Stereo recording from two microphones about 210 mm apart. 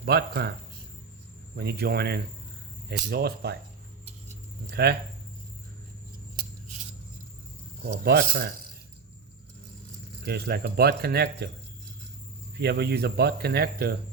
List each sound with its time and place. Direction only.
0.0 s speech: 50° right (ahead or behind)
1.5 s speech: 50° right (ahead or behind)
4.7 s speech: 50° right (ahead or behind)
7.9 s speech: 50° right (ahead or behind)
10.2 s speech: 50° right (ahead or behind)
12.5 s speech: 50° right (ahead or behind)